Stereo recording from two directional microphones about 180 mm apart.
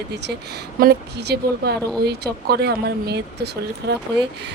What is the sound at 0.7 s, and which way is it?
Speech, 60° right (ahead or behind).